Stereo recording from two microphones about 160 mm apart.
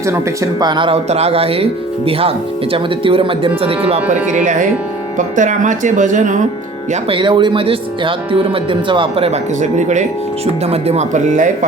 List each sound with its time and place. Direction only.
0.6 s speech: 30° right (ahead or behind)
5.1 s speech: 50° right (ahead or behind)
7.1 s speech: 30° right (ahead or behind); by 11.5 s 50° right (ahead or behind)